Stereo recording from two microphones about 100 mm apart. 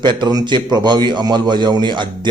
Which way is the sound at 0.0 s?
50° right (ahead or behind).